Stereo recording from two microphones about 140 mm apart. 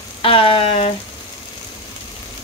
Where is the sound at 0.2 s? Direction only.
40° left (ahead or behind).